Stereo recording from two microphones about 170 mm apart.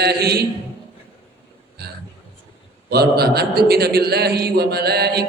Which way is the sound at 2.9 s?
70° right (ahead or behind).